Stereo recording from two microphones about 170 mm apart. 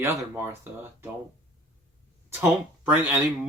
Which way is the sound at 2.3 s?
10° right (ahead or behind).